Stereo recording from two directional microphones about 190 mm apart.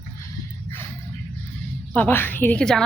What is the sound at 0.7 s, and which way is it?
Music, 10° left (ahead or behind).